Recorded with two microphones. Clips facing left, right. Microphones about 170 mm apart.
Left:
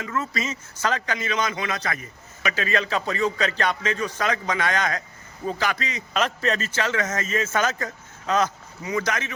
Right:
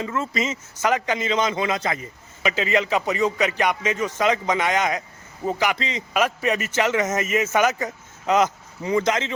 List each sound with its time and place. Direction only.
0.0 s a man's voice: 25° right (ahead or behind)
6.1 s a man's voice: 10° right (ahead or behind)